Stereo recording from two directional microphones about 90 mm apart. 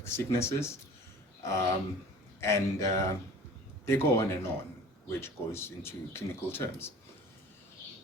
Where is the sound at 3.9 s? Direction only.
30° left (ahead or behind).